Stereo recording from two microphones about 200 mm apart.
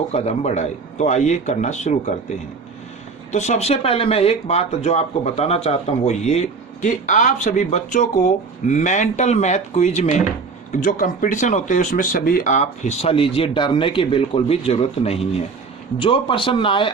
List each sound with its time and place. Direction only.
0.1 s speech: 35° left (ahead or behind)
3.3 s speech: 35° left (ahead or behind)